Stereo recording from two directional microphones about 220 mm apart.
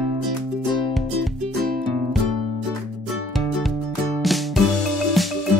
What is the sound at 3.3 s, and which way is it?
Music, centre (ahead or behind).